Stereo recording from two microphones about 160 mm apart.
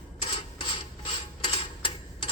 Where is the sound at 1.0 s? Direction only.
30° left (ahead or behind).